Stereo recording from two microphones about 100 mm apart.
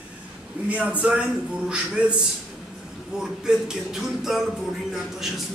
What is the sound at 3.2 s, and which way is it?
Speech, 5° right (ahead or behind).